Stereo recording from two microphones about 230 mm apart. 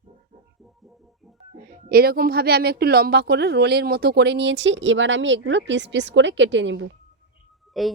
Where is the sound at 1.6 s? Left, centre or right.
Right.